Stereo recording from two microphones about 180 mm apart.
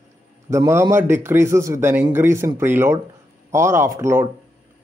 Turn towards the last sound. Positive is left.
turn(degrees=-15)  # may be behind; listen again after turning